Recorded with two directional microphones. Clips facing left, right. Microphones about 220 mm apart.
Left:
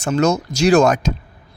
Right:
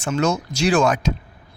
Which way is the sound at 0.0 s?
40° left (ahead or behind).